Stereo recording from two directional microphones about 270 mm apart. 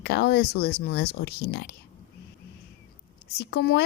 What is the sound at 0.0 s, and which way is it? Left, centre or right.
A woman's voice, left.